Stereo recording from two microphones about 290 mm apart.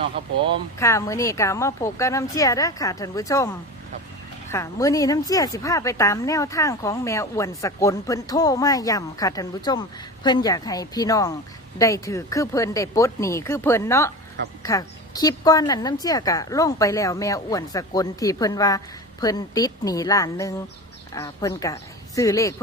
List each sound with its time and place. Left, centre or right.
0.0 s speech: centre
0.8 s a woman's voice: centre